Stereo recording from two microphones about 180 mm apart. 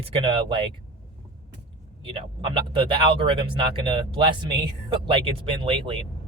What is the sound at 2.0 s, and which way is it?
Speech, 30° right (ahead or behind).